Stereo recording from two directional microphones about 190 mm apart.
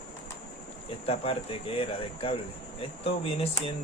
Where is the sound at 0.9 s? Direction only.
30° left (ahead or behind).